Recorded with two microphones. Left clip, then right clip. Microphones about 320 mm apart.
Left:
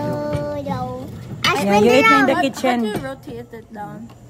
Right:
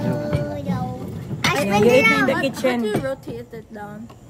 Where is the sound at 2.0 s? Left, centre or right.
Centre.